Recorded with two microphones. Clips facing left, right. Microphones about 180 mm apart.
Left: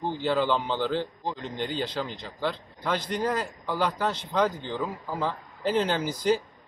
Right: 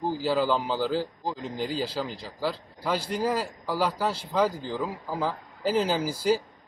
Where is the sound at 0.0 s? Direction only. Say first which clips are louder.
Even; 5° right (ahead or behind).